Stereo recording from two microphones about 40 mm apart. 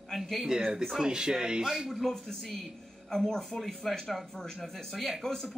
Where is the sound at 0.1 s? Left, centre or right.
Centre.